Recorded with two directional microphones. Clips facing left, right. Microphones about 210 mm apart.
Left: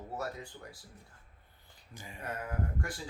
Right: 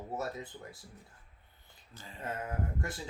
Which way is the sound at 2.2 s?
25° right (ahead or behind).